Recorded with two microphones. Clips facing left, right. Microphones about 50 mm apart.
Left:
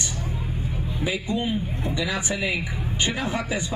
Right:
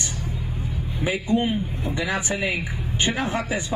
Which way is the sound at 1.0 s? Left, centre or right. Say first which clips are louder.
Right 4 dB; right.